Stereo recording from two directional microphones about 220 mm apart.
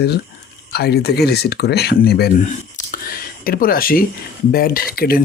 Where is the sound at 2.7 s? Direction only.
40° left (ahead or behind).